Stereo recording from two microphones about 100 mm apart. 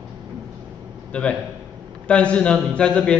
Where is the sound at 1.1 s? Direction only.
10° left (ahead or behind).